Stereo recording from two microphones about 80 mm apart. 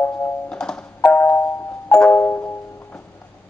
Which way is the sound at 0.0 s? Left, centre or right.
Centre.